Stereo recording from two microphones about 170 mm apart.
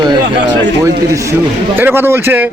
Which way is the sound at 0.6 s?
20° right (ahead or behind).